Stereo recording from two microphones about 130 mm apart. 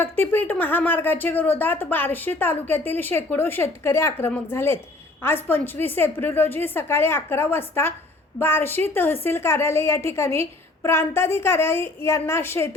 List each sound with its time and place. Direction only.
0.0 s a woman's voice: 15° left (ahead or behind)